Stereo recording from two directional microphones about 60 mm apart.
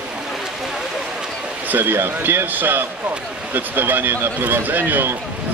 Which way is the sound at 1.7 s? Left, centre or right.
Right.